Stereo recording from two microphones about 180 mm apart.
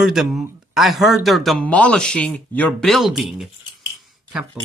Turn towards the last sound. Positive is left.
turn(degrees=-5)  # may be behind; listen again after turning